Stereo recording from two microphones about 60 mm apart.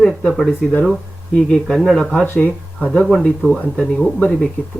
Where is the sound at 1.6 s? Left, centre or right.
Centre.